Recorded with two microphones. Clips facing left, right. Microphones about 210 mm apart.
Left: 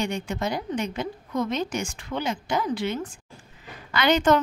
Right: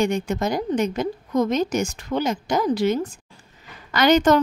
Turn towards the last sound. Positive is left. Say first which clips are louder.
# right 4 dB
turn(degrees=-40)  # may be behind; listen again after turning